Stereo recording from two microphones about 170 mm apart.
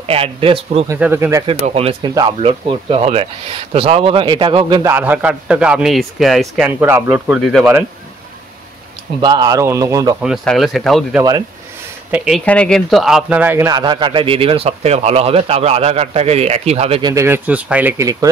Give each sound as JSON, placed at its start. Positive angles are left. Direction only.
{"t": 0.0, "sound": "speech", "side_deg": -35}
{"t": 0.9, "sound": "speech", "side_deg": -10}
{"t": 1.5, "sound": "speech", "side_deg": -35}
{"t": 2.0, "sound": "speech", "side_deg": -25}
{"t": 2.4, "sound": "speech", "side_deg": -35}
{"t": 4.9, "sound": "a man's voice", "side_deg": -10}
{"t": 9.2, "sound": "speech", "side_deg": -25}
{"t": 10.2, "sound": "a man's voice", "side_deg": 0}
{"t": 17.0, "sound": "speech", "side_deg": -15}